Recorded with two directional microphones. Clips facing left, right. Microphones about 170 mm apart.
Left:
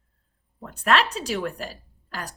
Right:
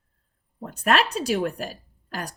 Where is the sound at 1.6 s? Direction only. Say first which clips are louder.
Right 2 dB; 45° right (ahead or behind).